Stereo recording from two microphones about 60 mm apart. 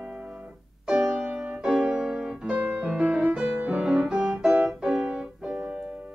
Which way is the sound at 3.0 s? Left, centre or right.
Right.